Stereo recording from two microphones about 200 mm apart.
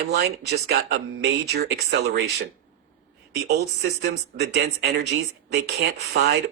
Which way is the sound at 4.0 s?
55° right (ahead or behind).